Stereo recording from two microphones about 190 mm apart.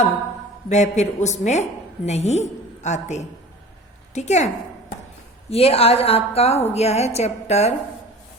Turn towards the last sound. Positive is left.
turn(degrees=35)  # may be behind; listen again after turning